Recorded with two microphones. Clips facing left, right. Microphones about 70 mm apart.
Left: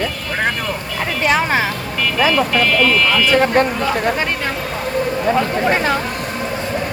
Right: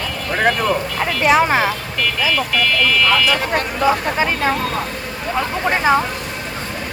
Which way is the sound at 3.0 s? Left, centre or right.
Centre.